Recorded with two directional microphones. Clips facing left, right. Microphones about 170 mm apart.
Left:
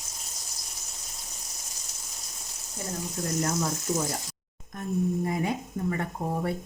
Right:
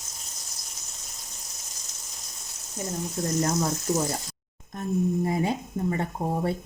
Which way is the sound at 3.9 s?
45° right (ahead or behind).